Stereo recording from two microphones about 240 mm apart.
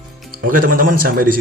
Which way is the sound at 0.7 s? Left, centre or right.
Right.